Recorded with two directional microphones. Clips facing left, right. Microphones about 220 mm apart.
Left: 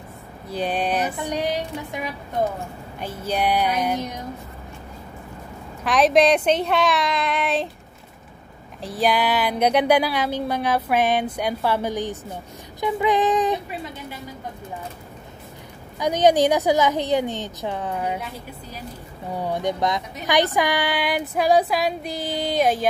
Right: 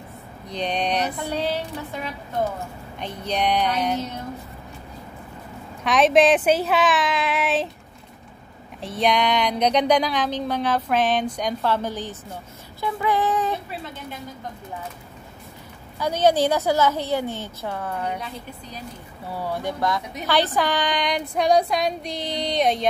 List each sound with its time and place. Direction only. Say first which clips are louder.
0.5 s a sound: left 1 dB; 5° left (ahead or behind)
1.1 s a sound: left 1 dB; 15° left (ahead or behind)
3.0 s speech: left 1 dB; 5° left (ahead or behind)
5.9 s female singing: even; centre (ahead or behind)
8.8 s speech: even; centre (ahead or behind)
16.0 s speech: left 2 dB; 15° left (ahead or behind)
19.3 s speech: left 3 dB; 20° left (ahead or behind)
20.5 s female singing: left 1 dB; 10° left (ahead or behind)